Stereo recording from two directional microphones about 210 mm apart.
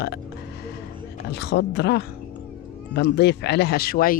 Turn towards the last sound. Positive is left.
turn(degrees=45)  # may be behind; listen again after turning